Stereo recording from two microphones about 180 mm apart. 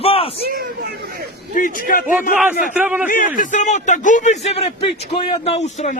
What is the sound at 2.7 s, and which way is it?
Speech, 10° right (ahead or behind).